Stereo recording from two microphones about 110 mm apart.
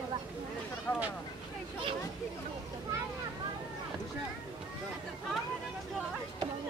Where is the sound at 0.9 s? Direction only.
25° left (ahead or behind).